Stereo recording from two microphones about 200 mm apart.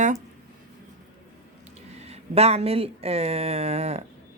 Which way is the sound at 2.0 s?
30° right (ahead or behind).